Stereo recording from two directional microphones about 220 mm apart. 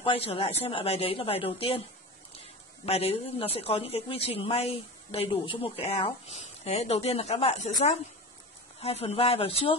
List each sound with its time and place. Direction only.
0.0 s a woman's voice: 25° left (ahead or behind)
2.8 s a woman's voice: 25° left (ahead or behind)